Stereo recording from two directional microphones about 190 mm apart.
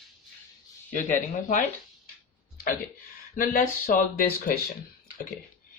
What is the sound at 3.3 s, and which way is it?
Speech, 45° left (ahead or behind).